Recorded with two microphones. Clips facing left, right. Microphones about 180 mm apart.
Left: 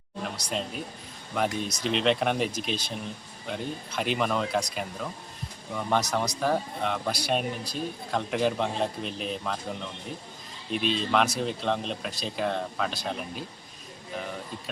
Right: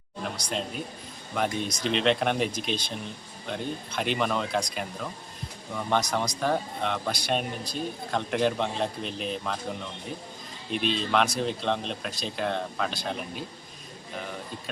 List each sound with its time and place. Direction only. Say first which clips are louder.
0.3 s speech: even; 5° left (ahead or behind)
10.7 s speech: even; centre (ahead or behind)